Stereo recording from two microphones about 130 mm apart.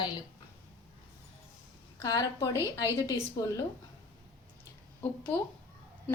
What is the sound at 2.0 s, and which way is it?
A woman's voice, 30° left (ahead or behind).